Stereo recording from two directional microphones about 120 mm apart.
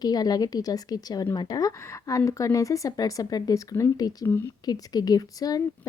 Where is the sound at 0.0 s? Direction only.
35° left (ahead or behind).